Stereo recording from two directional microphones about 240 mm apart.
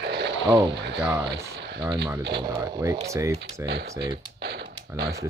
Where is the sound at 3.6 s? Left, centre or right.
Right.